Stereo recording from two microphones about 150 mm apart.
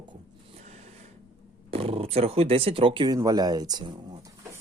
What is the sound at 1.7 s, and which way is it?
Speech, 40° right (ahead or behind).